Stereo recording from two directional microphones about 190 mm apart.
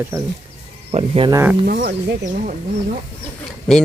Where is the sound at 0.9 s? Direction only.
30° right (ahead or behind).